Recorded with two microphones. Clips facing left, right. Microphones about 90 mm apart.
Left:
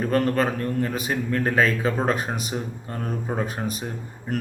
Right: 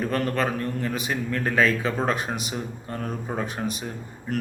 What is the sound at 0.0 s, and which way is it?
A man's voice, 35° left (ahead or behind).